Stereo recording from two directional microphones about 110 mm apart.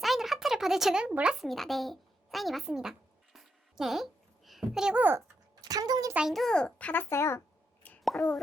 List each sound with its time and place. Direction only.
0.0 s speech: centre (ahead or behind)
3.3 s a sound: centre (ahead or behind)
5.0 s a sound: 25° right (ahead or behind)
5.6 s a child's voice: 35° right (ahead or behind)
6.1 s a child's voice: centre (ahead or behind); by 7.4 s 25° left (ahead or behind)
8.0 s speech: centre (ahead or behind)